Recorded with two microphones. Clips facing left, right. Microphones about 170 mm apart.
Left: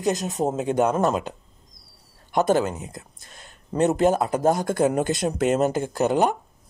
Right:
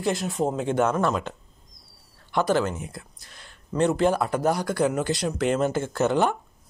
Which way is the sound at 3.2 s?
45° left (ahead or behind).